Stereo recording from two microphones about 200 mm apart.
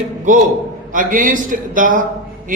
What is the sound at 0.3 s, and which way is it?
A man's voice, 40° right (ahead or behind).